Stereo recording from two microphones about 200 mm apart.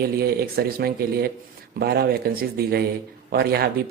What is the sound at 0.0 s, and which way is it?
Speech, 50° right (ahead or behind).